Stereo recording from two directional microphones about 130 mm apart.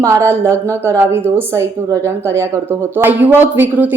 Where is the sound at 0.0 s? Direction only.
20° right (ahead or behind).